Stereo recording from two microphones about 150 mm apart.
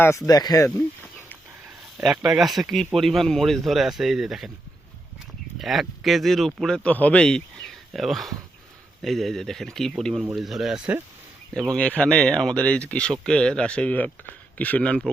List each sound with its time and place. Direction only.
0.3 s speech: 25° left (ahead or behind)
2.0 s speech: 5° right (ahead or behind)
5.5 s speech: centre (ahead or behind)
11.5 s speech: 5° left (ahead or behind)